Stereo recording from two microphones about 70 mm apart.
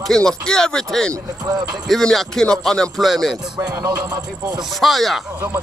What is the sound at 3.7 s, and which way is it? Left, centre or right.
Speech, right.